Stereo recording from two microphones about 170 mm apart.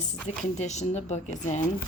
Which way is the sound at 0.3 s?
40° left (ahead or behind).